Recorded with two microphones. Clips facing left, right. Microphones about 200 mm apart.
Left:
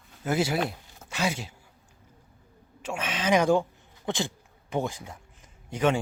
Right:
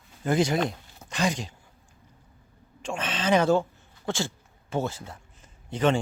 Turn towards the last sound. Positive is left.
turn(degrees=10)  # may be behind; listen again after turning